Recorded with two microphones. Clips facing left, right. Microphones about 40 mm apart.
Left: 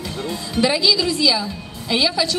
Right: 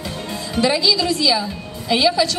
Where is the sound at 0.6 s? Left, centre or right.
Centre.